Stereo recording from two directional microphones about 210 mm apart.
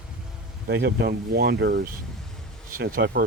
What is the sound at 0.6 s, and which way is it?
Speech, 55° right (ahead or behind).